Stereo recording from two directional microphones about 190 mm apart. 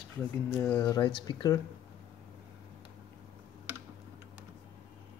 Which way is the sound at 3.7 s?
10° right (ahead or behind).